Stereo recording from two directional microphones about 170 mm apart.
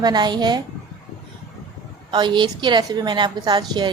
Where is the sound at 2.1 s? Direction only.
25° right (ahead or behind).